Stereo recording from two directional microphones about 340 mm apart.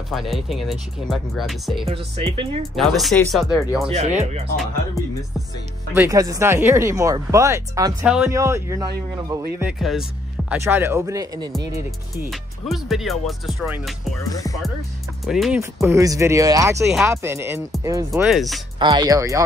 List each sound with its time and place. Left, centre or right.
0.1 s speech: centre
1.9 s speech: centre
2.7 s speech: centre
3.8 s speech: centre
5.9 s speech: centre
15.2 s speech: centre
18.8 s speech: centre